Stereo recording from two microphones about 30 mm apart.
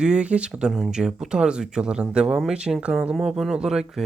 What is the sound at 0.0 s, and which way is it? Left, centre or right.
Speech, right.